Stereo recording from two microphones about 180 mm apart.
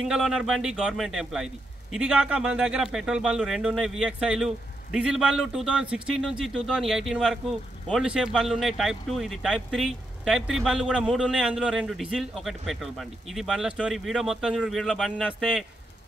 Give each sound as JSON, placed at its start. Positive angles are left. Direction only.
{"t": 0.0, "sound": "speech", "side_deg": -5}